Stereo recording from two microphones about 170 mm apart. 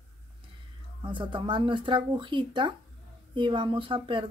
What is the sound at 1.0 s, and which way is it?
Speech, 30° right (ahead or behind).